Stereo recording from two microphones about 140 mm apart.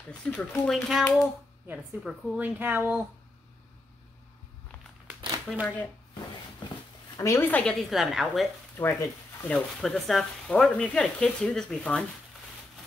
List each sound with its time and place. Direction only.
0.1 s speech: 10° left (ahead or behind); by 3.1 s 10° right (ahead or behind)
5.5 s speech: centre (ahead or behind)
7.2 s a woman's voice: 20° left (ahead or behind)
7.6 s speech: centre (ahead or behind)
8.7 s speech: 15° left (ahead or behind)
9.8 s speech: centre (ahead or behind)